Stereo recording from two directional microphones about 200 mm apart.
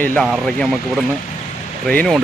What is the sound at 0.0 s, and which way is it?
Speech, 10° left (ahead or behind).